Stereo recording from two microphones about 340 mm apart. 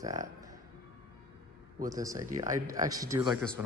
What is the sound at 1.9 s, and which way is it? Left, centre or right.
Speech, centre.